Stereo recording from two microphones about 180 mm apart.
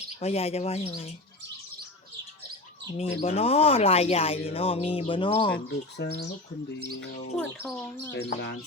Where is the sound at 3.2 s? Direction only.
35° left (ahead or behind).